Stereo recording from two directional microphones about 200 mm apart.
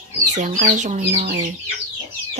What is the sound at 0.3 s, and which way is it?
Speech, 40° right (ahead or behind).